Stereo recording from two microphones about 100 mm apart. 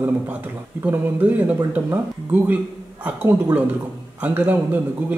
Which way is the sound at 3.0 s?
15° right (ahead or behind).